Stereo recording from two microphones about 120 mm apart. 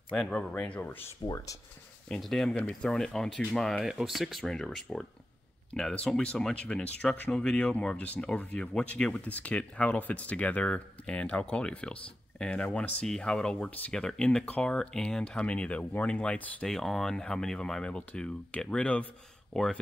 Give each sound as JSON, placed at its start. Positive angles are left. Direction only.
{"t": 0.1, "sound": "speech", "side_deg": 5}
{"t": 1.2, "sound": "speech", "side_deg": 30}
{"t": 2.0, "sound": "speech", "side_deg": 5}